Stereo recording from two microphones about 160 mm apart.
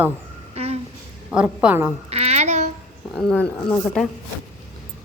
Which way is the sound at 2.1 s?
40° right (ahead or behind).